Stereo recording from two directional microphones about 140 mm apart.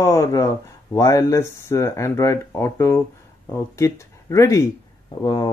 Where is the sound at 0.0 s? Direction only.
25° left (ahead or behind).